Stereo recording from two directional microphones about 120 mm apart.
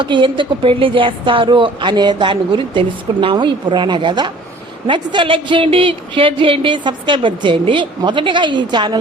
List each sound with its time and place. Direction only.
0.0 s speech: 45° right (ahead or behind)